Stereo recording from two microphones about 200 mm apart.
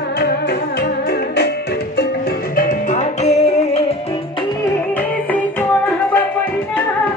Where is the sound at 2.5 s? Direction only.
40° left (ahead or behind).